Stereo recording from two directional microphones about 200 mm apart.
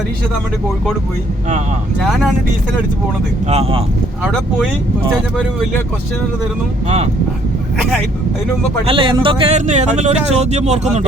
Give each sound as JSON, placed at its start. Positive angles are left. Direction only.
{"t": 2.0, "sound": "speech", "side_deg": 0}
{"t": 3.5, "sound": "speech", "side_deg": -30}
{"t": 8.9, "sound": "speech", "side_deg": -25}